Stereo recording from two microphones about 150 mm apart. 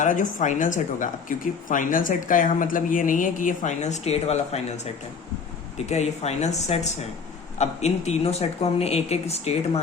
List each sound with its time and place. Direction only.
0.0 s speech: 60° left (ahead or behind)
5.7 s a woman's voice: 45° left (ahead or behind)